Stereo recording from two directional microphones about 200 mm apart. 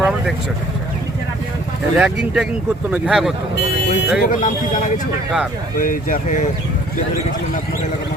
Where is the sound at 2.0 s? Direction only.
5° right (ahead or behind).